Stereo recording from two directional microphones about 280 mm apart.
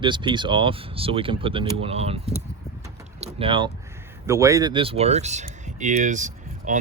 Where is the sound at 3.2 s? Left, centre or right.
Centre.